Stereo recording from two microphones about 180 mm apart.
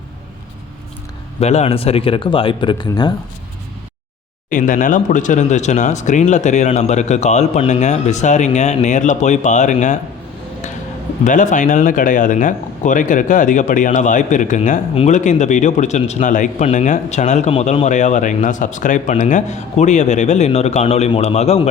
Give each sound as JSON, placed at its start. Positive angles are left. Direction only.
{"t": 1.4, "sound": "speech", "side_deg": 35}
{"t": 4.4, "sound": "speech", "side_deg": 50}
{"t": 11.3, "sound": "speech", "side_deg": 45}